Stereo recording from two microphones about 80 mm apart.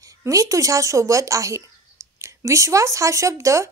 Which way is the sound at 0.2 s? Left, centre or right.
Right.